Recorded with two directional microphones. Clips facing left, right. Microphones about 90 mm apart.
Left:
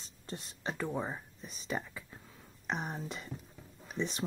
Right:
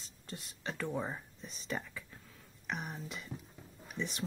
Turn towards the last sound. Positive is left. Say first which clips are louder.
# left 3 dB
turn(degrees=25)  # may be behind; listen again after turning